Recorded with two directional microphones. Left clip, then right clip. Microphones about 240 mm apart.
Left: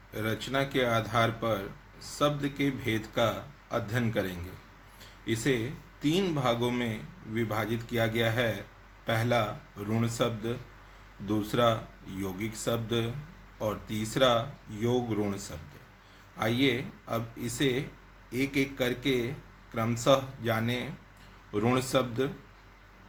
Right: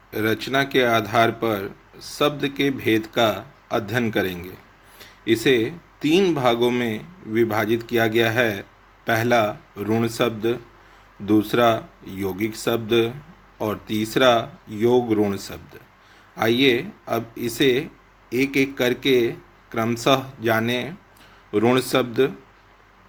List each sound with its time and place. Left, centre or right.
0.1 s speech: right